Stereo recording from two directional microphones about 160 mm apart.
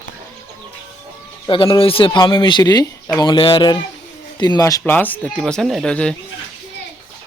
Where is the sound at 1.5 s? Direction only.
30° left (ahead or behind).